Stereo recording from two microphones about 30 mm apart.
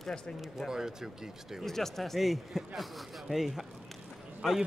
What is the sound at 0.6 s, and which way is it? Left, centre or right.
Speech, centre.